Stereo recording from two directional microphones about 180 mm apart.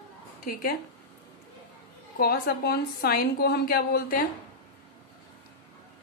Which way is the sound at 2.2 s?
60° left (ahead or behind).